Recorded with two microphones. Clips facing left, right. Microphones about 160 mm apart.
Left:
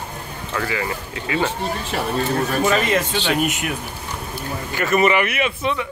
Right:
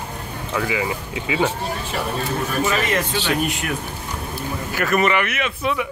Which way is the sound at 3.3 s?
20° left (ahead or behind).